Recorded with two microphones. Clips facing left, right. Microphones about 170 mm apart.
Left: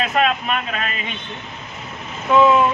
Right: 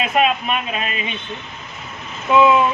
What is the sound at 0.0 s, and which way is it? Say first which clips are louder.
Speech: right 1 dB; 15° right (ahead or behind).